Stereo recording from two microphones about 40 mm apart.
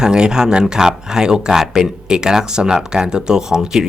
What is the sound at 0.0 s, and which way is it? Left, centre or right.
Speech, centre.